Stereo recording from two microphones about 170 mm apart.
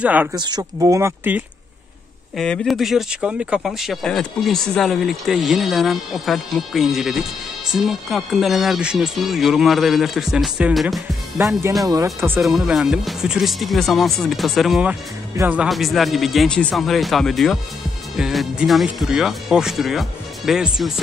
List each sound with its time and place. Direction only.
0.0 s speech: 10° right (ahead or behind)
0.3 s speech: 25° right (ahead or behind)
2.3 s speech: 5° left (ahead or behind)
11.3 s speech: 15° right (ahead or behind)
12.4 s speech: centre (ahead or behind)